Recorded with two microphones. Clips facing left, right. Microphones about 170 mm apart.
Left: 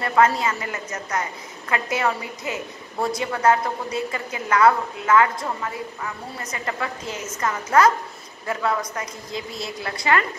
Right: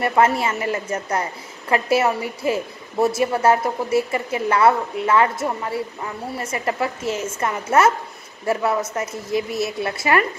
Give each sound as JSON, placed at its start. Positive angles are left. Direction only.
{"t": 0.0, "sound": "a woman's voice", "side_deg": -25}